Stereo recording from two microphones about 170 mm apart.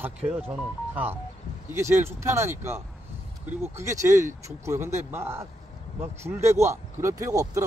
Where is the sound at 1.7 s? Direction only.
15° right (ahead or behind).